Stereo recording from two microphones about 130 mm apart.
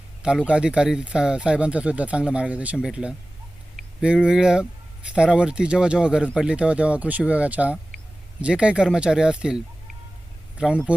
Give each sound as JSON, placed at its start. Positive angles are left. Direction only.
{"t": 0.2, "sound": "speech", "side_deg": -5}
{"t": 10.6, "sound": "speech", "side_deg": -10}